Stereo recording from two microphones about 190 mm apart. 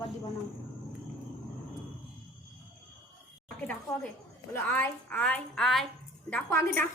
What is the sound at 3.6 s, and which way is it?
A woman's voice, 5° left (ahead or behind).